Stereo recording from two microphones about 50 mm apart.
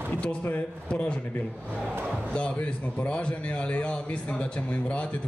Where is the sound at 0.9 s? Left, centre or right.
Left.